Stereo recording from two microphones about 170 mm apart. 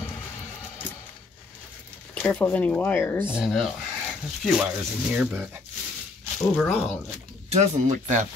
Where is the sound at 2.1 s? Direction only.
10° left (ahead or behind).